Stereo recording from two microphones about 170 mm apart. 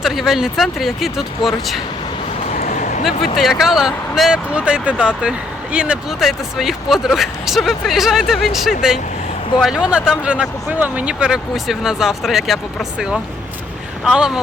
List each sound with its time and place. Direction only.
0.0 s speech: centre (ahead or behind)
2.6 s a sound: 50° left (ahead or behind)
3.3 s speech: centre (ahead or behind)
14.0 s speech: centre (ahead or behind)